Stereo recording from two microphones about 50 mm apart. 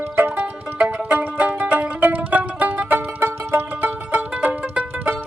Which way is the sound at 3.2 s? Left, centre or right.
Right.